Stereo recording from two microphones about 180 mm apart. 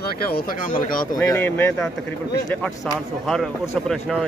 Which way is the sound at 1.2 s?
10° left (ahead or behind).